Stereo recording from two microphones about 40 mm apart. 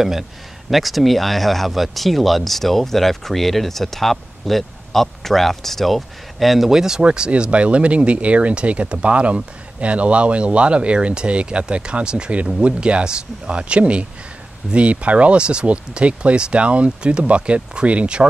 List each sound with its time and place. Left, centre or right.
0.7 s speech: centre
6.7 s speech: centre
7.0 s speech: right